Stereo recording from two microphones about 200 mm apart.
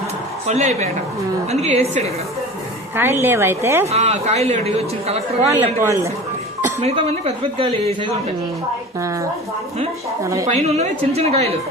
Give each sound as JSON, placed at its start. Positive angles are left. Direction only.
{"t": 0.4, "sound": "speech", "side_deg": -35}
{"t": 2.9, "sound": "a woman's voice", "side_deg": -10}
{"t": 3.8, "sound": "speech", "side_deg": -30}
{"t": 5.5, "sound": "a woman's voice", "side_deg": -15}
{"t": 6.7, "sound": "speech", "side_deg": -30}
{"t": 10.5, "sound": "speech", "side_deg": -35}